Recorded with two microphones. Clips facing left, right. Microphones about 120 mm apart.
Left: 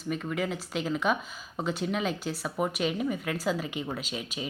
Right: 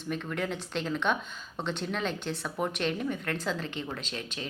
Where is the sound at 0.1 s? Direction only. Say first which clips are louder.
Left 2 dB; 5° left (ahead or behind).